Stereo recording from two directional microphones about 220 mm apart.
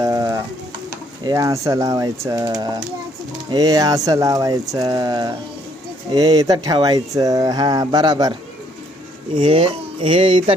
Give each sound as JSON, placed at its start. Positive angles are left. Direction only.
{"t": 0.0, "sound": "sizzle", "side_deg": -15}
{"t": 1.2, "sound": "speech", "side_deg": -15}